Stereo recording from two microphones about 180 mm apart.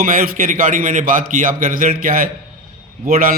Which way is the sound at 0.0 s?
50° right (ahead or behind).